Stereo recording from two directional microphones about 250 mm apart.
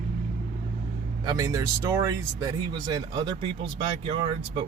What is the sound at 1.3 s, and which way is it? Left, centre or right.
Speech, centre.